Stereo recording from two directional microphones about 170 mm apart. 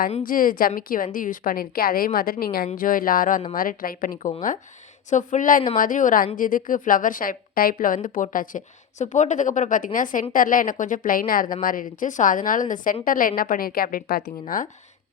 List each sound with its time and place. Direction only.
0.2 s a woman's voice: 55° left (ahead or behind)